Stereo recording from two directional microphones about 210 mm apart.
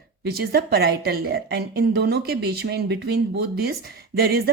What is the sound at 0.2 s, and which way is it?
A woman's voice, 50° right (ahead or behind).